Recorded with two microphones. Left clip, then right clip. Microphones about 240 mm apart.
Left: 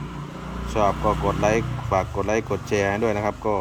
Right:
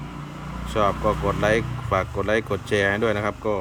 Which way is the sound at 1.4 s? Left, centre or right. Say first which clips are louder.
Right 2 dB; centre.